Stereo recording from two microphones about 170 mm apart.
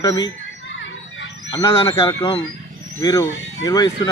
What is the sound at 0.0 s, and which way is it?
Speech, 25° left (ahead or behind).